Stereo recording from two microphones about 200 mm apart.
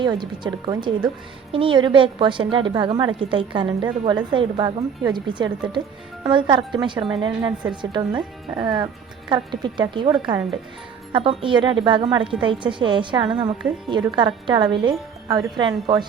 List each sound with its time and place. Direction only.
0.0 s a woman's voice: 20° right (ahead or behind)